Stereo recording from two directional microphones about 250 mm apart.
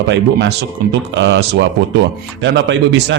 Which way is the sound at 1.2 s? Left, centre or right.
Right.